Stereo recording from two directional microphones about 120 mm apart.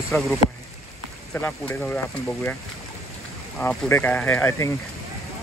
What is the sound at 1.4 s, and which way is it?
Speech, 15° left (ahead or behind).